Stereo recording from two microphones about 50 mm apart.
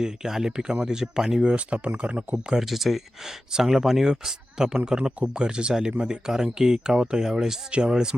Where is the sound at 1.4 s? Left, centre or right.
Right.